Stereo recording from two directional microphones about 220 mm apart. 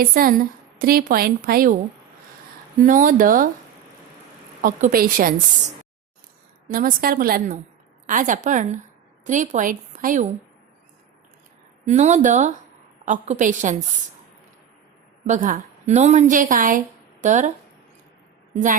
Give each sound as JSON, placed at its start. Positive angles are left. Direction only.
{"t": 0.0, "sound": "a woman's voice", "side_deg": -40}
{"t": 2.8, "sound": "a woman's voice", "side_deg": -35}
{"t": 4.6, "sound": "a woman's voice", "side_deg": -40}
{"t": 11.9, "sound": "a woman's voice", "side_deg": -30}
{"t": 15.3, "sound": "a woman's voice", "side_deg": -35}
{"t": 18.5, "sound": "a woman's voice", "side_deg": -35}